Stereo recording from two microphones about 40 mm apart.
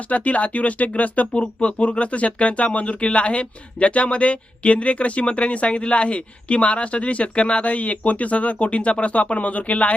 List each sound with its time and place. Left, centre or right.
0.1 s speech: left